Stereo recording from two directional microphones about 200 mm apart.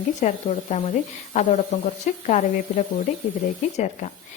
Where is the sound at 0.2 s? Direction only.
35° left (ahead or behind).